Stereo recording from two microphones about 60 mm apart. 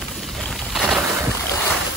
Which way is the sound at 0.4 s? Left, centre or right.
Centre.